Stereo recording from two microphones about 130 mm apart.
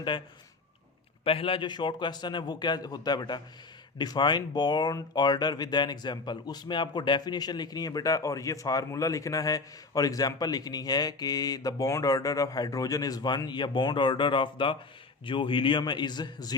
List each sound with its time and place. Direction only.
1.2 s speech: 45° left (ahead or behind)